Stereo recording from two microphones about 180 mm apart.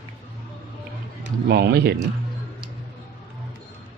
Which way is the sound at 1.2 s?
60° right (ahead or behind).